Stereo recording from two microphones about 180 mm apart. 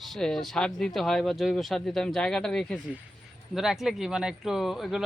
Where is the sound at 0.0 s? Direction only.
Centre (ahead or behind).